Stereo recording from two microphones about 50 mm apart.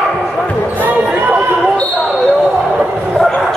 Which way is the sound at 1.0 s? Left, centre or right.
Right.